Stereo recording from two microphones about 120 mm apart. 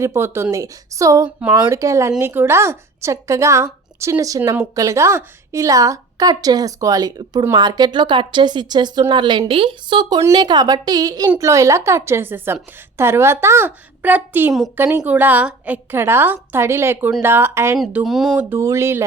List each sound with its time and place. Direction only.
0.0 s a woman's voice: 20° right (ahead or behind)
18.0 s speech: centre (ahead or behind)
18.3 s a woman's voice: 15° right (ahead or behind)